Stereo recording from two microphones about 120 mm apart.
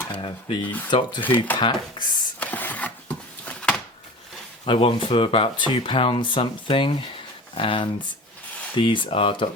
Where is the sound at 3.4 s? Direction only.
10° left (ahead or behind).